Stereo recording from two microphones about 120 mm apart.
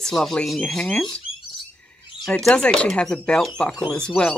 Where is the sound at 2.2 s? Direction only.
5° left (ahead or behind).